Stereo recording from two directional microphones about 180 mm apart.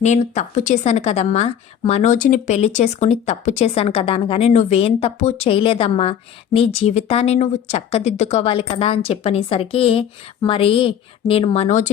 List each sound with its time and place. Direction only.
0.0 s a woman's voice: 40° left (ahead or behind)